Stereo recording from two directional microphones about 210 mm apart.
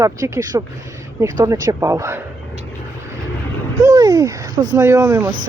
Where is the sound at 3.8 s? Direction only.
15° right (ahead or behind).